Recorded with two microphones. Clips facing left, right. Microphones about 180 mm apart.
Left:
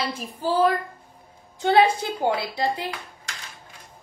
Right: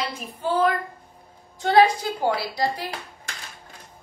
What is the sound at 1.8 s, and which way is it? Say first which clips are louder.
Speech: even; 25° left (ahead or behind).